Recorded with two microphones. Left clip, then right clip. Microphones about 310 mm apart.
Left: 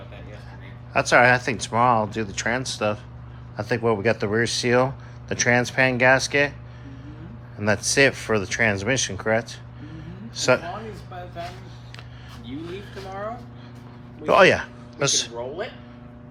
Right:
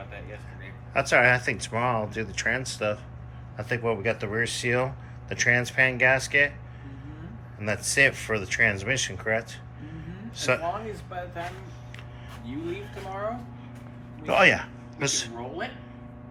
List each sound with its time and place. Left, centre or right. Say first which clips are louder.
0.9 s speech: left 4 dB; centre
7.6 s speech: left 3 dB; centre
11.1 s speech: right 2 dB; centre
14.3 s speech: left 4 dB; centre